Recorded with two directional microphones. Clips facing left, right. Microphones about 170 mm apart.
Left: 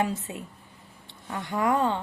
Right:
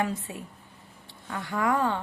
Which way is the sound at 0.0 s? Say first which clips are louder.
Left 1 dB; 20° left (ahead or behind).